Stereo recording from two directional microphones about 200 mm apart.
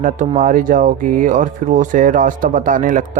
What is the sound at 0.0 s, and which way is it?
Speech, 40° right (ahead or behind).